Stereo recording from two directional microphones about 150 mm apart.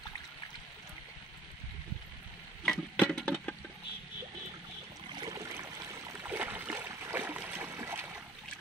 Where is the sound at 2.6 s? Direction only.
5° left (ahead or behind).